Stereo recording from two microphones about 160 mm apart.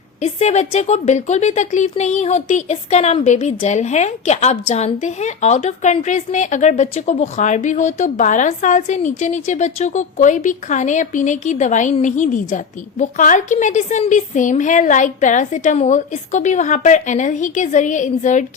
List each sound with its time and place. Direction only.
0.2 s a woman's voice: 45° left (ahead or behind)